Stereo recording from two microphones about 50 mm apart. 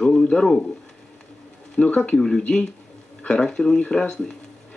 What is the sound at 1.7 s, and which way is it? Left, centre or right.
Speech, centre.